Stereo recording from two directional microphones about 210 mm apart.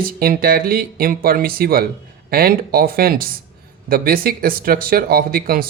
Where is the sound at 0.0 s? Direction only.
45° right (ahead or behind).